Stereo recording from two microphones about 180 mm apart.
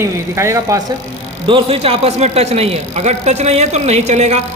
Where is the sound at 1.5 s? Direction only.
30° right (ahead or behind).